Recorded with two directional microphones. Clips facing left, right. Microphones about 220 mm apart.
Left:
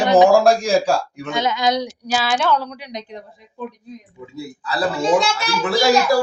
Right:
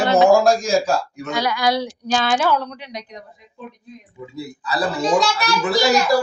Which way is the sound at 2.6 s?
10° left (ahead or behind).